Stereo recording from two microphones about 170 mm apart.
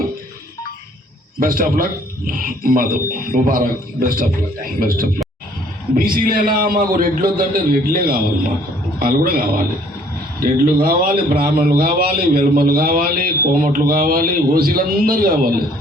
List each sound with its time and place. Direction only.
1.4 s a man's voice: 55° right (ahead or behind)
10.4 s a man's voice: 60° right (ahead or behind)